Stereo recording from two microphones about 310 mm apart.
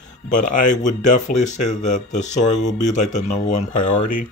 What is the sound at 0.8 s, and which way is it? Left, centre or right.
Speech, left.